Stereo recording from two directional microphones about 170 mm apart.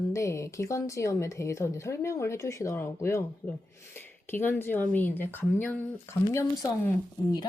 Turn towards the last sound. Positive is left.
turn(degrees=15)  # may be behind; listen again after turning